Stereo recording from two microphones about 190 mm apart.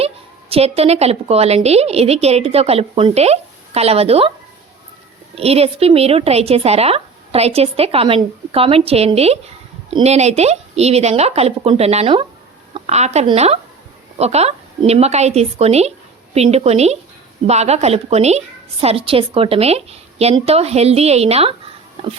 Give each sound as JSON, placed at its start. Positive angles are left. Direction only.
{"t": 0.5, "sound": "a woman's voice", "side_deg": -30}
{"t": 5.3, "sound": "a woman's voice", "side_deg": -30}